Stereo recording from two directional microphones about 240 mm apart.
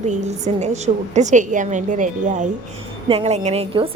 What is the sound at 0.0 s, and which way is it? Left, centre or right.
A woman's voice, right.